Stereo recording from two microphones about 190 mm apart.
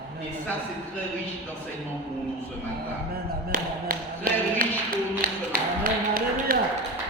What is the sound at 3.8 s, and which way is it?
Speech, 50° right (ahead or behind).